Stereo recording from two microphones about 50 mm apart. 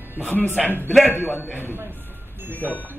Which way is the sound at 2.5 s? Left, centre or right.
Right.